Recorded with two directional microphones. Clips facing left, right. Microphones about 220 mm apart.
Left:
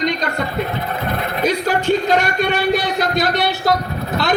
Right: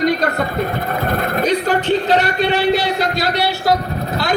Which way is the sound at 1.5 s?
10° left (ahead or behind).